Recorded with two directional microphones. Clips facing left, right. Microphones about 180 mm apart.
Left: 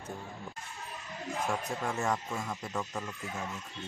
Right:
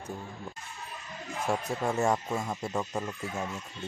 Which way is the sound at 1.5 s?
30° right (ahead or behind).